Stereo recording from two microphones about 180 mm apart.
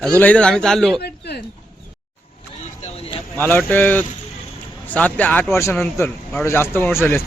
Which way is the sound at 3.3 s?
10° left (ahead or behind).